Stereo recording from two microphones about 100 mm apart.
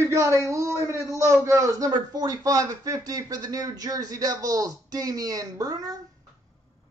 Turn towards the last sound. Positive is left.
turn(degrees=-40)  # may be behind; listen again after turning